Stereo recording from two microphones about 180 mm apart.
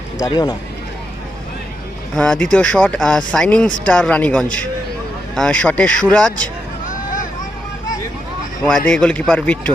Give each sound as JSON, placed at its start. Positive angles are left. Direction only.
{"t": 0.2, "sound": "speech", "side_deg": 25}
{"t": 2.1, "sound": "speech", "side_deg": 5}
{"t": 6.8, "sound": "vehicle", "side_deg": 45}
{"t": 8.6, "sound": "speech", "side_deg": 5}